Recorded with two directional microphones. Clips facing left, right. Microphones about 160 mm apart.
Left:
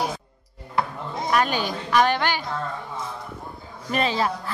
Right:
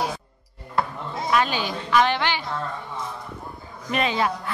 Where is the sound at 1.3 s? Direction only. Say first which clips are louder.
Even; 45° left (ahead or behind).